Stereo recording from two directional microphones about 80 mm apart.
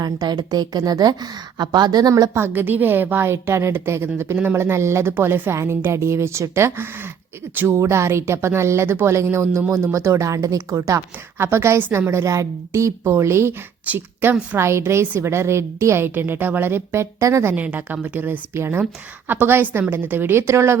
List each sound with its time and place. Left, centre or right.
0.0 s a woman's voice: right
2.3 s a woman's voice: right
14.5 s speech: right
17.5 s a woman's voice: centre; by 20.7 s right